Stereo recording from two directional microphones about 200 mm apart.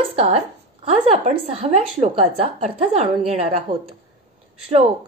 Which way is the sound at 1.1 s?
30° right (ahead or behind).